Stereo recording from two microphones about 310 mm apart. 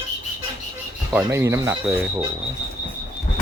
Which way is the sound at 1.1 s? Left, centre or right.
Centre.